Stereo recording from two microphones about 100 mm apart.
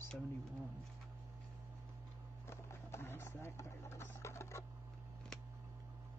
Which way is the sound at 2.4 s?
25° left (ahead or behind).